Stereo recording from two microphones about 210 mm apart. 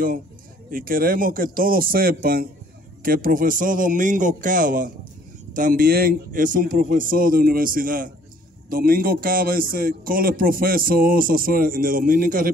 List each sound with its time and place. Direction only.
0.7 s a man's voice: 40° right (ahead or behind)